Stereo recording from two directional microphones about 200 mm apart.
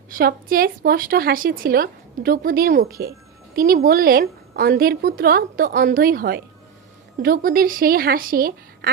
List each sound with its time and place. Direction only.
0.1 s a woman's voice: 50° right (ahead or behind)